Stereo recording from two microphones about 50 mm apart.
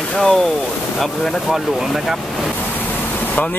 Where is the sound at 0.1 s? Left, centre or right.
Centre.